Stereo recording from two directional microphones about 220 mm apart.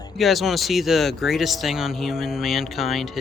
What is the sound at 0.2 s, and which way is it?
Speech, centre (ahead or behind).